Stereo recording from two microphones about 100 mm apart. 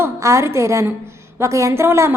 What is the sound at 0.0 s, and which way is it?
A woman's voice, 30° right (ahead or behind).